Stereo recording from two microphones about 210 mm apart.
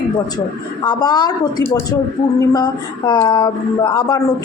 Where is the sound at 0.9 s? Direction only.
20° left (ahead or behind).